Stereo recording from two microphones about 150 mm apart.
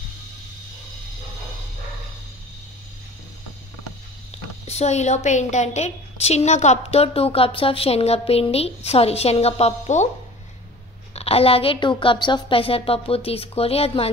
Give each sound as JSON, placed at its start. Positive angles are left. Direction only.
{"t": 4.6, "sound": "a woman's voice", "side_deg": 45}
{"t": 11.1, "sound": "a woman's voice", "side_deg": 40}